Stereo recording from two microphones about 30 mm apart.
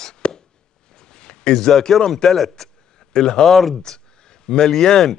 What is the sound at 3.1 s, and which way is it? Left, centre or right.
Speech, left.